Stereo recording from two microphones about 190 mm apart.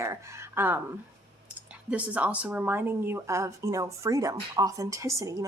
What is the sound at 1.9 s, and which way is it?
Speech, 5° right (ahead or behind).